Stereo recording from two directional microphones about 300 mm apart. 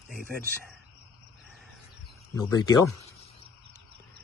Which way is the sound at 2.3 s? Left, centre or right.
Centre.